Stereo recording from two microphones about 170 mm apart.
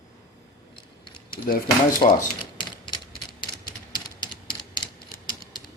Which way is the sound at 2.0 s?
25° left (ahead or behind).